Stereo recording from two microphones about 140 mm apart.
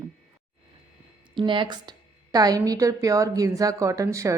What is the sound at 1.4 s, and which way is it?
A woman's voice, 35° right (ahead or behind).